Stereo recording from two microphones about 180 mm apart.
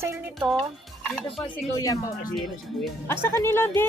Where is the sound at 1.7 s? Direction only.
20° left (ahead or behind).